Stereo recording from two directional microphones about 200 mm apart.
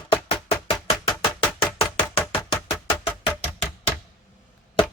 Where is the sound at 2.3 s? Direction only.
30° left (ahead or behind).